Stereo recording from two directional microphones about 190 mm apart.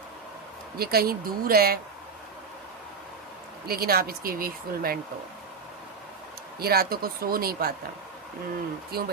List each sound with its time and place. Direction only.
0.8 s speech: 55° right (ahead or behind)
3.7 s speech: 55° right (ahead or behind)
6.6 s speech: 55° right (ahead or behind)
8.9 s speech: 55° right (ahead or behind)